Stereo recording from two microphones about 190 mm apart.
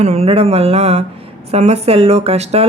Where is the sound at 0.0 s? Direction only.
35° right (ahead or behind).